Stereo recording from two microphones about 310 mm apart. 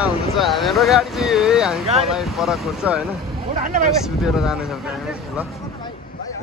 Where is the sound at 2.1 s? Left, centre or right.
Centre.